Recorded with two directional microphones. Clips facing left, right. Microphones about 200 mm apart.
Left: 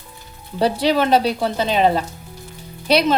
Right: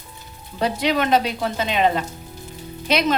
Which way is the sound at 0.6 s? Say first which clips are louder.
Left 4 dB; 30° left (ahead or behind).